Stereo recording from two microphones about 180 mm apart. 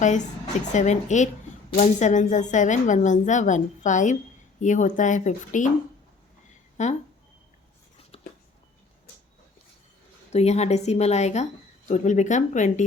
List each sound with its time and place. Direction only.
0.7 s a woman's voice: 40° left (ahead or behind)
6.8 s a woman's voice: 40° left (ahead or behind)
8.1 s a sound: 35° left (ahead or behind)
10.3 s a woman's voice: 35° left (ahead or behind)